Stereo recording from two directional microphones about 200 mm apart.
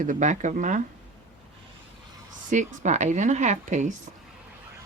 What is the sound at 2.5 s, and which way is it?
Speech, 35° right (ahead or behind).